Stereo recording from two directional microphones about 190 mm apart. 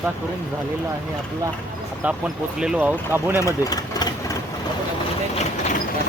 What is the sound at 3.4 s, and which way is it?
Engine, 15° left (ahead or behind).